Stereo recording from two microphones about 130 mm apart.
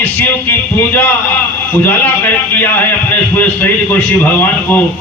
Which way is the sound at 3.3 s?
15° left (ahead or behind).